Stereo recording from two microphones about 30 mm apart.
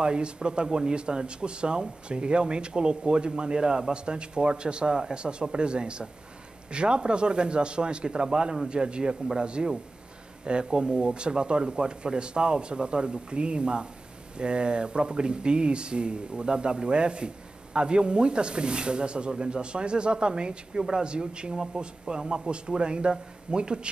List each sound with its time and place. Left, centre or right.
0.0 s speech: right